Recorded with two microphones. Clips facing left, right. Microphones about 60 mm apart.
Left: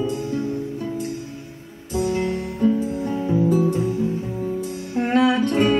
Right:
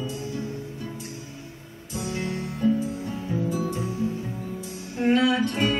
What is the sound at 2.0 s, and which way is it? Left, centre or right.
Music, left.